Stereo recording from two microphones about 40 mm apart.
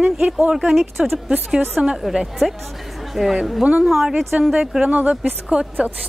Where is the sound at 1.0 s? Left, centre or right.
Centre.